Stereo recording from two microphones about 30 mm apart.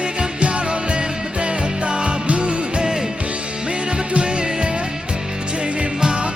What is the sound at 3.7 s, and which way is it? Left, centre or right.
Music, right.